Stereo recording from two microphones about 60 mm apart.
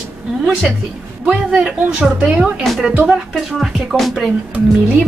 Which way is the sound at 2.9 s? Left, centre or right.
Right.